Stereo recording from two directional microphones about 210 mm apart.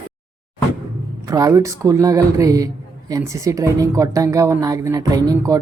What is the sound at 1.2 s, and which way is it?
A woman's voice, 15° right (ahead or behind).